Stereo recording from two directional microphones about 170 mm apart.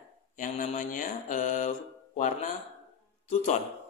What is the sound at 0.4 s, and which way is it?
Speech, 50° left (ahead or behind).